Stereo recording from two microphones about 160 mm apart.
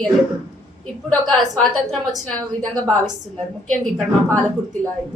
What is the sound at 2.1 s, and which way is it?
Speech, 5° left (ahead or behind).